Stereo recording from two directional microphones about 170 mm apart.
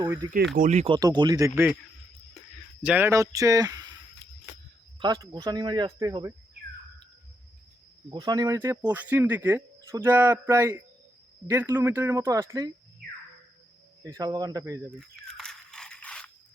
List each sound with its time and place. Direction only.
0.0 s speech: 25° right (ahead or behind)
0.5 s speech: 45° right (ahead or behind)
0.9 s speech: 25° right (ahead or behind)
2.8 s speech: 10° right (ahead or behind)
4.9 s speech: 25° right (ahead or behind)
8.1 s speech: 25° right (ahead or behind)
8.5 s speech: 10° right (ahead or behind)
14.0 s speech: 20° right (ahead or behind)
14.9 s a sound: 5° left (ahead or behind)